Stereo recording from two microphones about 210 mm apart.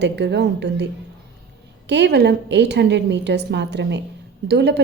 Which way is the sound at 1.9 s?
55° right (ahead or behind).